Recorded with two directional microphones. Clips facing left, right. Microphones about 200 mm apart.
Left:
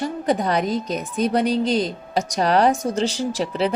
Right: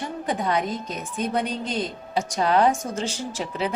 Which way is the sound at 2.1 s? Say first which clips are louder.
Left 2 dB; 40° left (ahead or behind).